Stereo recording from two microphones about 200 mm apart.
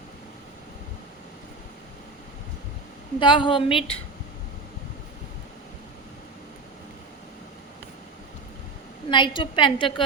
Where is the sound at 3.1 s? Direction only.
25° left (ahead or behind).